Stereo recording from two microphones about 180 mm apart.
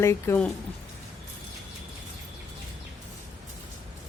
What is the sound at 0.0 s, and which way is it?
Speech, 15° left (ahead or behind).